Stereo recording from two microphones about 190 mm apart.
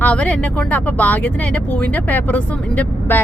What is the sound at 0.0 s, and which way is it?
Speech, 5° left (ahead or behind).